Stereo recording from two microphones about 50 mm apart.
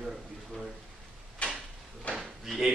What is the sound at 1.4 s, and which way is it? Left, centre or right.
Drawer open or close, left.